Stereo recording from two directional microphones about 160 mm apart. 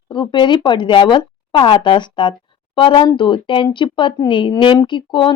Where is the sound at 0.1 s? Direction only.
30° left (ahead or behind).